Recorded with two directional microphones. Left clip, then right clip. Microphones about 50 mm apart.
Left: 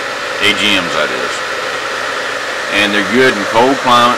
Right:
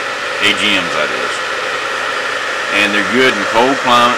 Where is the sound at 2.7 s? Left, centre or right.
Centre.